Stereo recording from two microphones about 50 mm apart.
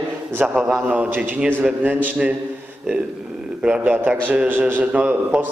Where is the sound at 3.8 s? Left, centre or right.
Right.